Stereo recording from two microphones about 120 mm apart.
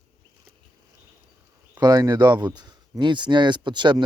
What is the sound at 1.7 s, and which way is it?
Speech, 35° right (ahead or behind).